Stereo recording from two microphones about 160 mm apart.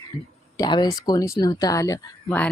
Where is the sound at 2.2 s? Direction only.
10° left (ahead or behind).